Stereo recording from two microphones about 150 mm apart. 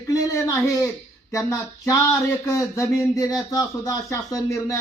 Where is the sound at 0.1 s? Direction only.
25° left (ahead or behind).